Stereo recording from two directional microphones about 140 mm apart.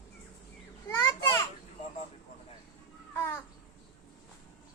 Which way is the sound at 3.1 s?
15° left (ahead or behind).